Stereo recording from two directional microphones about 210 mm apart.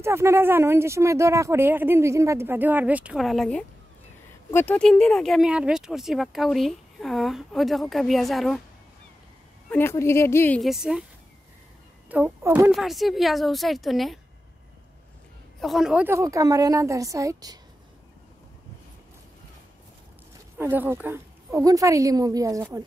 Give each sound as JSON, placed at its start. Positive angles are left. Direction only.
{"t": 0.0, "sound": "speech", "side_deg": -15}
{"t": 9.7, "sound": "a woman's voice", "side_deg": 10}
{"t": 12.1, "sound": "speech", "side_deg": -10}
{"t": 15.6, "sound": "speech", "side_deg": 0}
{"t": 20.5, "sound": "speech", "side_deg": -10}